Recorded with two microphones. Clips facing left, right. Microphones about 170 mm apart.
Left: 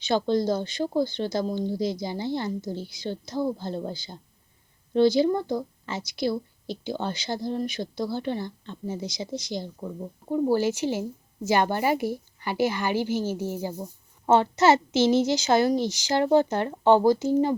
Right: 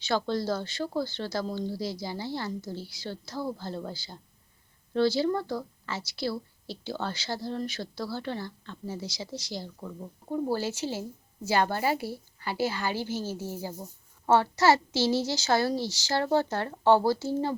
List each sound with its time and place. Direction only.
0.0 s a woman's voice: 20° left (ahead or behind)